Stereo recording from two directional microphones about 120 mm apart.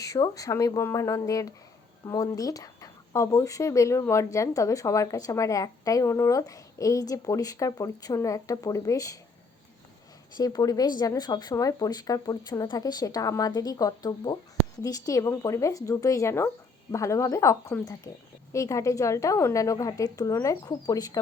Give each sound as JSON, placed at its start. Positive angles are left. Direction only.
{"t": 0.0, "sound": "speech", "side_deg": 30}
{"t": 10.3, "sound": "speech", "side_deg": 30}